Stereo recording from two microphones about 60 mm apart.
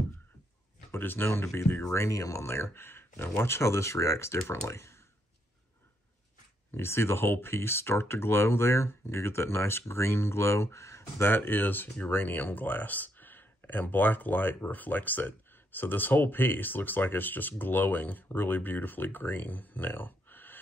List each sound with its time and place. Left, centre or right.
0.9 s speech: left
1.3 s speech: left
2.4 s speech: left
6.8 s speech: left
11.2 s speech: left